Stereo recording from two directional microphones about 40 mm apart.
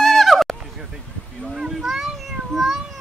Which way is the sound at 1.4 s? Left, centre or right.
Centre.